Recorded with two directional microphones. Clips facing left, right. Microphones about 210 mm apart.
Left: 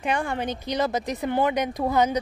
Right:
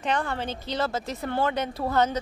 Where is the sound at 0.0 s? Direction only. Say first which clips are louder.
Left 2 dB; 10° left (ahead or behind).